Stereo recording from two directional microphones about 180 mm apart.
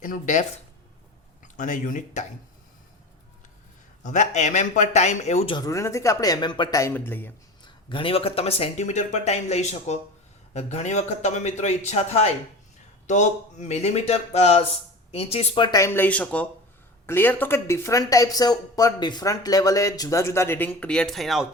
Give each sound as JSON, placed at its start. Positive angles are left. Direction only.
{"t": 0.0, "sound": "speech", "side_deg": 45}
{"t": 1.5, "sound": "speech", "side_deg": 45}
{"t": 4.0, "sound": "speech", "side_deg": 45}
{"t": 5.5, "sound": "speech", "side_deg": 20}
{"t": 7.6, "sound": "speech", "side_deg": 30}